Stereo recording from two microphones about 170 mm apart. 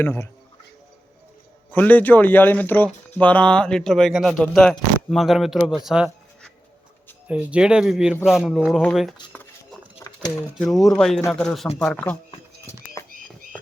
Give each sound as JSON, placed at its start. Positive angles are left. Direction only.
{"t": 0.0, "sound": "speech", "side_deg": 15}
{"t": 1.7, "sound": "speech", "side_deg": 10}
{"t": 10.5, "sound": "speech", "side_deg": 0}
{"t": 13.0, "sound": "frog", "side_deg": 20}